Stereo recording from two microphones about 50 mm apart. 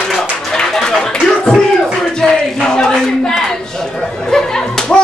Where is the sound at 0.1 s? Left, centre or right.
Centre.